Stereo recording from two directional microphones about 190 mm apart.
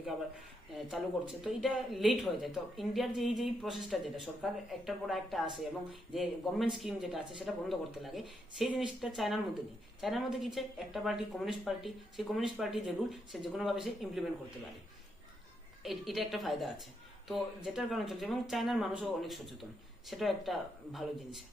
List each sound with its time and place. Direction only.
0.7 s speech: centre (ahead or behind)
15.8 s speech: centre (ahead or behind)